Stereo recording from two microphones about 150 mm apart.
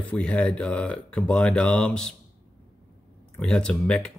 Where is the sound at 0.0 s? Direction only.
10° left (ahead or behind).